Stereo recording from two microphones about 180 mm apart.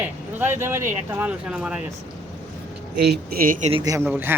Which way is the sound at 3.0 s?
60° right (ahead or behind).